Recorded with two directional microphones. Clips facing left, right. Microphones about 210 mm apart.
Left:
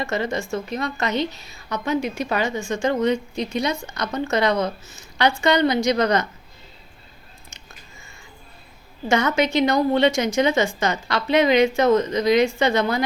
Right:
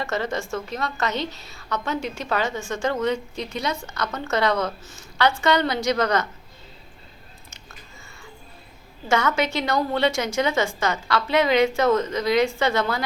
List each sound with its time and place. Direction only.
0.0 s a woman's voice: 15° left (ahead or behind)
9.0 s a woman's voice: 15° left (ahead or behind)